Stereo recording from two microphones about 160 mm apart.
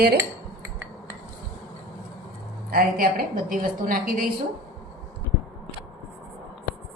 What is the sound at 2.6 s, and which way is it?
Speech, 70° right (ahead or behind).